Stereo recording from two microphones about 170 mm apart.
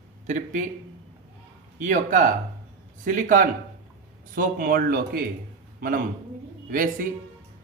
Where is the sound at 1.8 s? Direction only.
50° right (ahead or behind).